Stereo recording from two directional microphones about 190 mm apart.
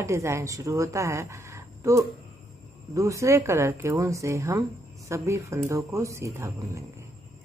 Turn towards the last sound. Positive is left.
turn(degrees=-15)  # may be behind; listen again after turning